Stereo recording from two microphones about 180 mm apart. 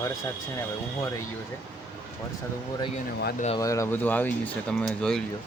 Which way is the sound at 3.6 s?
15° left (ahead or behind).